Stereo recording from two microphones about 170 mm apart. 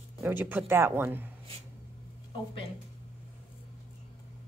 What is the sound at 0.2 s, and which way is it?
Speech, 10° right (ahead or behind).